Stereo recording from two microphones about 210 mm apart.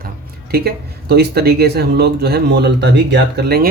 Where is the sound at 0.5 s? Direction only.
50° right (ahead or behind).